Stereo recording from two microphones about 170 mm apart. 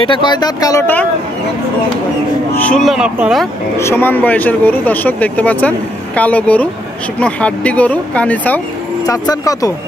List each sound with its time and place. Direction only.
0.0 s speech: 30° left (ahead or behind)
2.5 s speech: 5° left (ahead or behind)
3.7 s speech: 15° left (ahead or behind)
9.0 s speech: 20° left (ahead or behind)